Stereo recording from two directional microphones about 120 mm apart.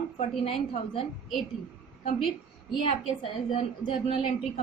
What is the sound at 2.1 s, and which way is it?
A woman's voice, 50° left (ahead or behind).